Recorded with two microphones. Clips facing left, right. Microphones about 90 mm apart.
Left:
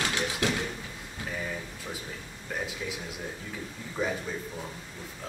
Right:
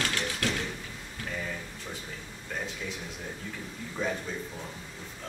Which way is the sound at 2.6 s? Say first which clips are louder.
Left 2 dB; 5° left (ahead or behind).